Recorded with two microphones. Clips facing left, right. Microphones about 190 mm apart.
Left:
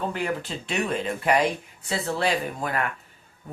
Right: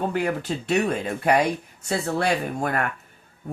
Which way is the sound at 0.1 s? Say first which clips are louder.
Right 4 dB; 45° right (ahead or behind).